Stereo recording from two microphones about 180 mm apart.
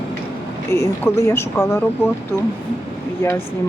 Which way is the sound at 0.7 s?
15° left (ahead or behind).